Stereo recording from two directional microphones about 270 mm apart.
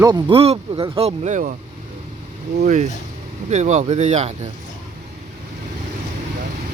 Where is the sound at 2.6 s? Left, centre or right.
Right.